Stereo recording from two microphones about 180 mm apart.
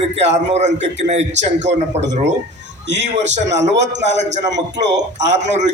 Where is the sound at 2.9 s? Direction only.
80° right.